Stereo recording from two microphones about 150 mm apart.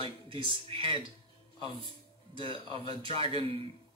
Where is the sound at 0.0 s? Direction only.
35° right (ahead or behind).